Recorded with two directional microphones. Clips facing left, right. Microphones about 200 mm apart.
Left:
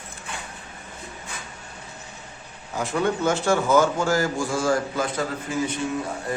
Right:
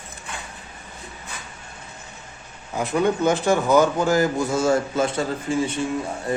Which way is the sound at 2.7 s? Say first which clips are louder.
Right 3 dB; 15° right (ahead or behind).